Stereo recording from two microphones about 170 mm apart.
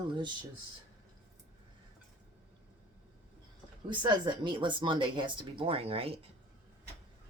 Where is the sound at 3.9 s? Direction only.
25° right (ahead or behind).